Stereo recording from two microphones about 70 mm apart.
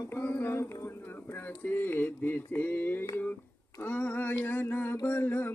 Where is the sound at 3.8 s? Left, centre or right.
Left.